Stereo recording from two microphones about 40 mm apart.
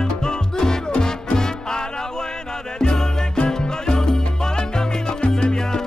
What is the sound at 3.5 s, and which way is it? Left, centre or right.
Music, centre.